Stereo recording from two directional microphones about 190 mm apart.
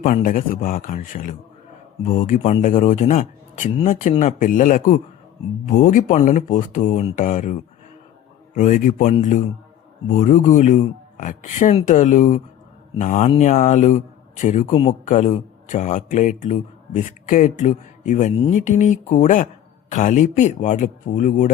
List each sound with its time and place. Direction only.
0.0 s a man's voice: 45° left (ahead or behind)
8.5 s a man's voice: 45° left (ahead or behind)
14.7 s speech: 25° left (ahead or behind)
15.0 s speech: 40° left (ahead or behind)